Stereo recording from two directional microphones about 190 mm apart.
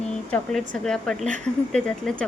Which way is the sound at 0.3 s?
5° left (ahead or behind).